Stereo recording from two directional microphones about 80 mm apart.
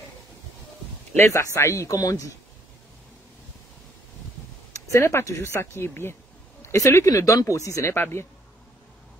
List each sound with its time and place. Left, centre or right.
1.1 s speech: left
4.7 s speech: left
7.1 s speech: left
7.9 s speech: left